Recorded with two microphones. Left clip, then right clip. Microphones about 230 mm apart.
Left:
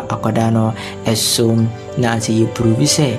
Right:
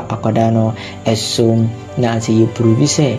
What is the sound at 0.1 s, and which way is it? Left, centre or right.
Speech, centre.